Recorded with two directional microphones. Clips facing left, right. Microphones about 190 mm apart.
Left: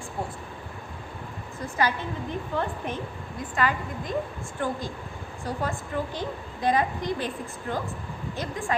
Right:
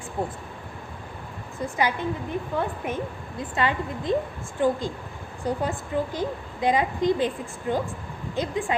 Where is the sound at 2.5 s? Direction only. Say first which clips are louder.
Right 1 dB; 10° right (ahead or behind).